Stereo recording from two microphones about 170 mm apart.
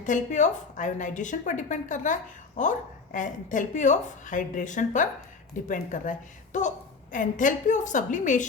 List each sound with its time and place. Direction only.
0.0 s a woman's voice: 45° left (ahead or behind)